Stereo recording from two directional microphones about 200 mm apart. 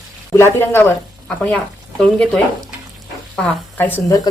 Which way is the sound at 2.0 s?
5° left (ahead or behind).